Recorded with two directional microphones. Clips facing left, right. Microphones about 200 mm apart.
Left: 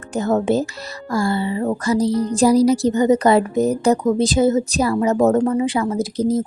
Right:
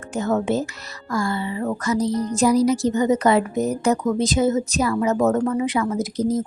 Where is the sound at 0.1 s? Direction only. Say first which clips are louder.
Left 3 dB; 35° left (ahead or behind).